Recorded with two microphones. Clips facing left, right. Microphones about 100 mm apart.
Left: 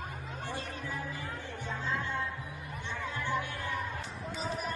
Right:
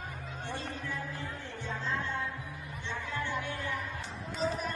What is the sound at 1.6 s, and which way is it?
Music, 15° left (ahead or behind).